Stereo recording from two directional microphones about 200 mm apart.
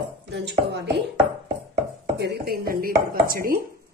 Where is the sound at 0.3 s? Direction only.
55° right (ahead or behind).